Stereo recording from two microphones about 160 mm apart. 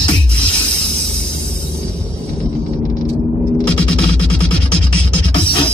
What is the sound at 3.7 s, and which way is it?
Music, 10° left (ahead or behind).